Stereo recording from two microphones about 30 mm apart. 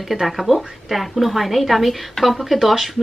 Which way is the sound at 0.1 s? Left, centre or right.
Centre.